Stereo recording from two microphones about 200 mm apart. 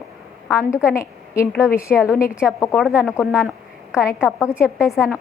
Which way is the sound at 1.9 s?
5° right (ahead or behind).